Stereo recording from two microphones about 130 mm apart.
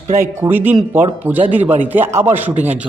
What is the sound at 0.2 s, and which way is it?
A man's voice, 15° right (ahead or behind).